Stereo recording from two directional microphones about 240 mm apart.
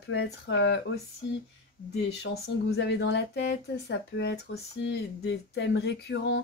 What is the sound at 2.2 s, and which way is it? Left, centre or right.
Speech, left.